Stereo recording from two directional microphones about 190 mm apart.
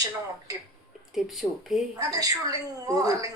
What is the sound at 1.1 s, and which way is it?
Speech, centre (ahead or behind).